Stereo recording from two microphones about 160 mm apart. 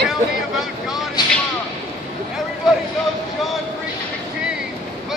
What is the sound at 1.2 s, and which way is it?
Vehicle, 25° left (ahead or behind).